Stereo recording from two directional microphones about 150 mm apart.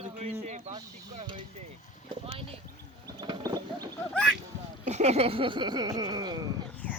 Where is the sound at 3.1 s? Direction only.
30° right (ahead or behind).